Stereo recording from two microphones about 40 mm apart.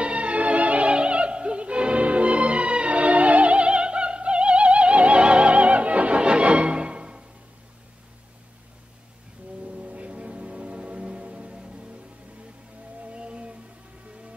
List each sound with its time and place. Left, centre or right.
0.0 s music: right
0.9 s opera: right
9.8 s music: right
13.0 s music: right